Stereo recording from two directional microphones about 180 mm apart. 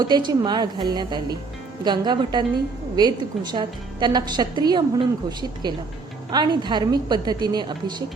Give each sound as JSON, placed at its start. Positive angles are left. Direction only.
{"t": 0.0, "sound": "a woman's voice", "side_deg": -25}